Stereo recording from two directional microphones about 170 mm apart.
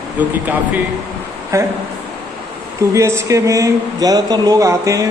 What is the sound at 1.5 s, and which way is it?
Speech, 15° right (ahead or behind).